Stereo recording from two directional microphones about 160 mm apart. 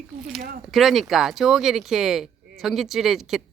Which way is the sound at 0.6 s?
Centre (ahead or behind).